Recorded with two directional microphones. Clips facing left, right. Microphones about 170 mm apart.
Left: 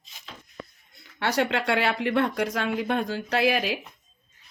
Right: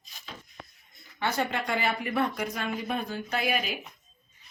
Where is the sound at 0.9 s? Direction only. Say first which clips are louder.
Left 4 dB; 75° left (ahead or behind).